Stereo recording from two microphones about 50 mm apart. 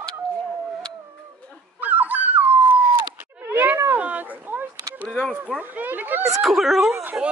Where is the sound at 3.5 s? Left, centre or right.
Right.